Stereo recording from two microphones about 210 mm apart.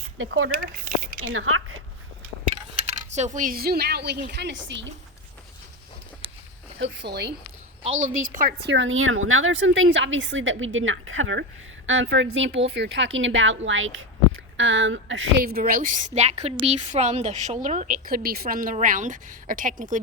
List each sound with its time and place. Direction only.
0.2 s a woman's voice: 75° right (ahead or behind)
3.2 s a woman's voice: 35° right (ahead or behind); by 4.9 s 60° right (ahead or behind)
7.1 s a woman's voice: 50° right (ahead or behind)
7.9 s a woman's voice: 70° right (ahead or behind)
8.3 s a woman's voice: 45° right (ahead or behind); by 15.3 s 65° right (ahead or behind)
15.4 s a woman's voice: 45° right (ahead or behind)